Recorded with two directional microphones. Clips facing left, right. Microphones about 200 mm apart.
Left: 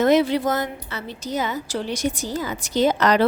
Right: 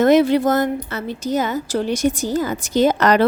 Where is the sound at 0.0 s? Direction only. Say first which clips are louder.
Right 4 dB; 50° right (ahead or behind).